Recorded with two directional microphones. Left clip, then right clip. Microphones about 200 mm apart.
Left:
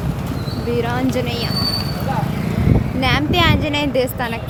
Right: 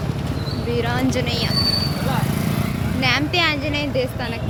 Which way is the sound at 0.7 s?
15° left (ahead or behind).